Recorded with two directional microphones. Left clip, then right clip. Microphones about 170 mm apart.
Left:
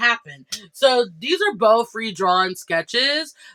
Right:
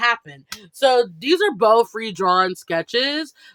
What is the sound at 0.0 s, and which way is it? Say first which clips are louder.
Speech: even; 40° right (ahead or behind).